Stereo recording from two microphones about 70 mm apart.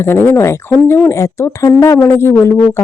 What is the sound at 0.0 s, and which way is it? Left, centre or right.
Speech, left.